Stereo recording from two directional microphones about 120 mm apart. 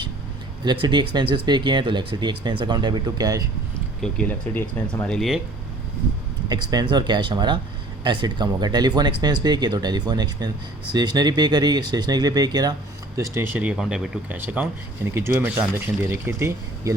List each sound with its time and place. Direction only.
0.6 s speech: 40° right (ahead or behind)
4.0 s speech: 10° left (ahead or behind)
6.5 s speech: 35° right (ahead or behind)
13.1 s speech: 25° right (ahead or behind); by 14.3 s 5° right (ahead or behind)
14.3 s speech: 15° right (ahead or behind)